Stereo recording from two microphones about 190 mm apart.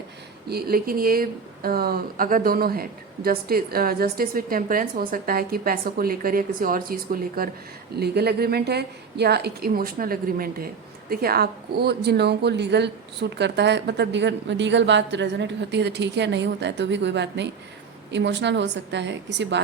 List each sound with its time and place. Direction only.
0.4 s a woman's voice: 55° right (ahead or behind)